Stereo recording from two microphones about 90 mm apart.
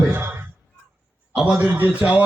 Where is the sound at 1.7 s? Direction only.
20° right (ahead or behind).